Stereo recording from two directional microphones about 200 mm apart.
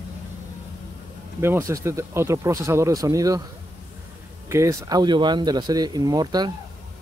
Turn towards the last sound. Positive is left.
turn(degrees=-20)  # may be behind; listen again after turning